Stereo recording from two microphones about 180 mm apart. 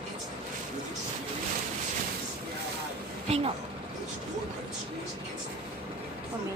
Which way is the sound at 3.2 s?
35° right (ahead or behind).